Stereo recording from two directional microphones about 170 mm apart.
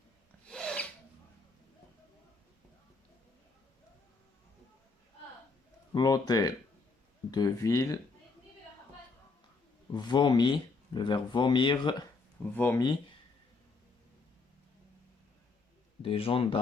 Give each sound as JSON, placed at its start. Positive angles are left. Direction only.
{"t": 0.4, "sound": "filing", "side_deg": 5}
{"t": 5.9, "sound": "speech", "side_deg": 25}
{"t": 9.9, "sound": "speech", "side_deg": 25}
{"t": 12.4, "sound": "speech", "side_deg": 10}
{"t": 16.0, "sound": "speech", "side_deg": 35}